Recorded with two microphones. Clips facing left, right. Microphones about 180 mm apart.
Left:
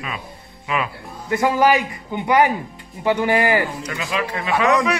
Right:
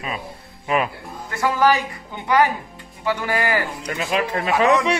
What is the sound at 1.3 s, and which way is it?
Speech, 15° left (ahead or behind).